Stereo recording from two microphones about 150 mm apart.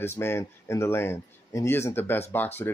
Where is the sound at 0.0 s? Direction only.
15° left (ahead or behind).